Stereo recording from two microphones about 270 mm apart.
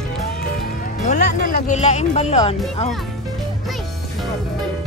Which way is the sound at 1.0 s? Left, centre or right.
Left.